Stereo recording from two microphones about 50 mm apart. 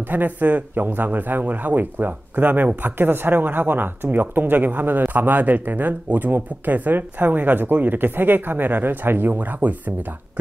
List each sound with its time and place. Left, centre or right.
0.0 s speech: right